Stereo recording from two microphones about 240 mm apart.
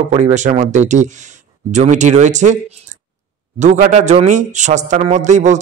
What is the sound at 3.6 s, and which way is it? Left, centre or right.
A man's voice, right.